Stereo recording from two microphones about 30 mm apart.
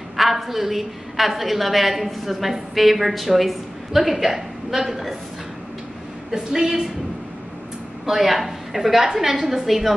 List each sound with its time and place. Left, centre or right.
0.2 s a woman's voice: centre
6.3 s a woman's voice: right
8.1 s a woman's voice: centre